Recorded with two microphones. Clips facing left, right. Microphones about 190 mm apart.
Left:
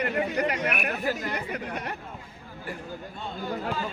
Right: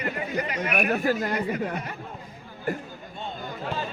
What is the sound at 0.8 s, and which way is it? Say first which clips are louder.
Speech: right 5 dB; 45° right (ahead or behind).